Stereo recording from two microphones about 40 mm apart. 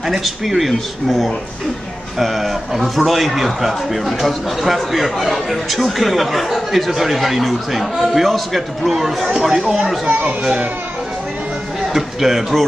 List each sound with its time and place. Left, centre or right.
0.0 s a man's voice: centre
10.0 s a child's voice: right
11.9 s a man's voice: centre